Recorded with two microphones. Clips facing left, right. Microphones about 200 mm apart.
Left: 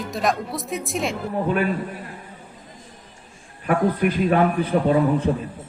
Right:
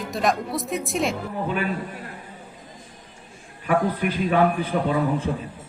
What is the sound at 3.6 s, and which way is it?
A man's voice, 40° left (ahead or behind).